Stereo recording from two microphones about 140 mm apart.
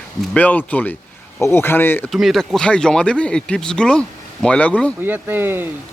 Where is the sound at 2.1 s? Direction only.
Centre (ahead or behind).